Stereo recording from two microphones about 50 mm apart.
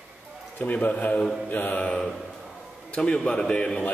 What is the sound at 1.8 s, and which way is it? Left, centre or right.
A man's voice, centre.